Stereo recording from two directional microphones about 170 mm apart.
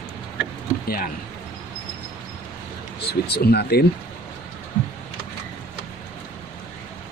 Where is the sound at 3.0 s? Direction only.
70° left (ahead or behind).